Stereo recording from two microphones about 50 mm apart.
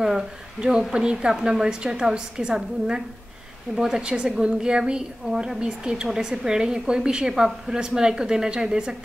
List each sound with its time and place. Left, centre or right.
0.0 s a woman's voice: centre
4.0 s a woman's voice: centre